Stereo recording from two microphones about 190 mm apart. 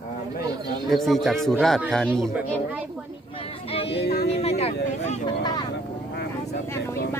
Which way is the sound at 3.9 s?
60° left (ahead or behind).